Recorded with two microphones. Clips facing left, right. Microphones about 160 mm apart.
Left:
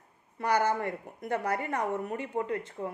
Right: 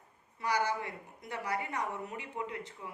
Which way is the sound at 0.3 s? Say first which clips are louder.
Left 5 dB; 55° left (ahead or behind).